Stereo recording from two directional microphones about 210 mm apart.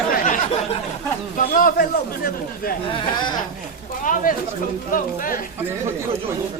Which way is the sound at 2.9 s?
20° left (ahead or behind).